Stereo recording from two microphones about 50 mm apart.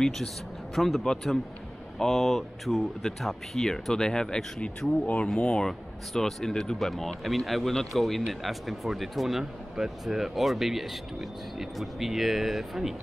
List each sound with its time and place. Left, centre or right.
0.7 s speech: centre
5.7 s speech: centre